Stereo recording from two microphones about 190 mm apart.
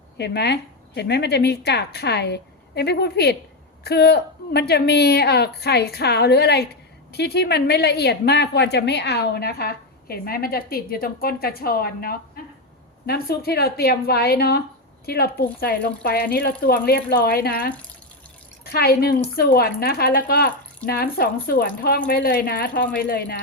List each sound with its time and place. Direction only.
0.2 s a woman's voice: 60° left (ahead or behind)